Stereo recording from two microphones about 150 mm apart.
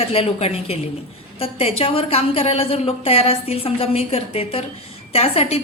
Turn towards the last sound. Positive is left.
turn(degrees=40)  # may be behind; listen again after turning